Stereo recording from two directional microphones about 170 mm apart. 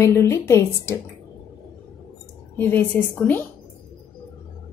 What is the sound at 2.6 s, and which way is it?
Speech, 10° left (ahead or behind).